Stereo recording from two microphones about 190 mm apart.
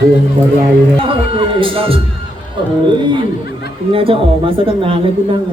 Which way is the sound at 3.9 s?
30° right (ahead or behind).